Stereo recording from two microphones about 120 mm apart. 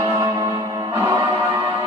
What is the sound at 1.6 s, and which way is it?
Music, 45° right (ahead or behind).